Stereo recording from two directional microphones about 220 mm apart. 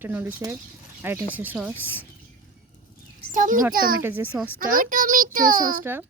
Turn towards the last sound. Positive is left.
turn(degrees=-10)  # may be behind; listen again after turning